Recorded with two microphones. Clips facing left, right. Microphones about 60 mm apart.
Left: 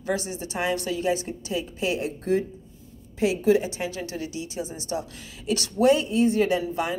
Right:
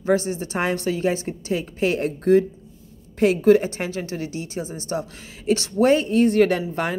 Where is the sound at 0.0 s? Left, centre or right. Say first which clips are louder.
Right 7 dB; right.